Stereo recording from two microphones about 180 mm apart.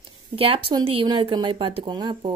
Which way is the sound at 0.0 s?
30° right (ahead or behind).